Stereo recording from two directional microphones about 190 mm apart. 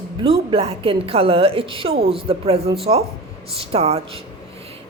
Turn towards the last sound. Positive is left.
turn(degrees=-35)  # may be behind; listen again after turning